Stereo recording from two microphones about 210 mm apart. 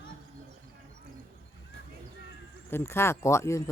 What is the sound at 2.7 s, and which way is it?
Speech, 10° left (ahead or behind).